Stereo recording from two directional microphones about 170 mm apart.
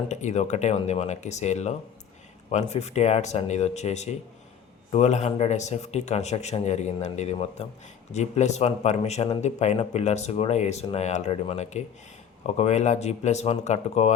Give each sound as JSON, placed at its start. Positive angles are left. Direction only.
{"t": 0.1, "sound": "speech", "side_deg": 40}